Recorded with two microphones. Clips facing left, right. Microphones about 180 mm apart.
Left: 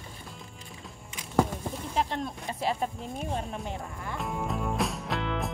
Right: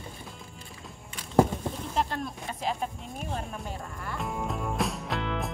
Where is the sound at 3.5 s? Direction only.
20° left (ahead or behind).